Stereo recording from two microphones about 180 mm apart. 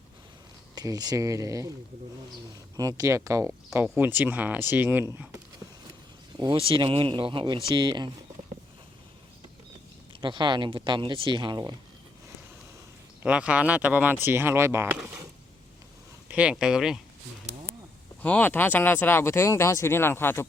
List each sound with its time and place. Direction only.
0.8 s speech: 20° right (ahead or behind)
2.7 s speech: 20° right (ahead or behind)
6.3 s speech: 25° right (ahead or behind)
10.1 s speech: 25° right (ahead or behind)
13.2 s speech: 5° right (ahead or behind)
16.3 s speech: 5° right (ahead or behind)
18.2 s speech: 10° left (ahead or behind)